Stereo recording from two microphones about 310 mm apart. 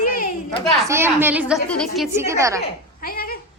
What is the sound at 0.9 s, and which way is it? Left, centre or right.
Speech, centre.